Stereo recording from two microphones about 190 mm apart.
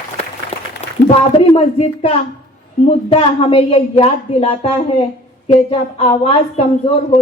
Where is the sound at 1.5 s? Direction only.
35° left (ahead or behind).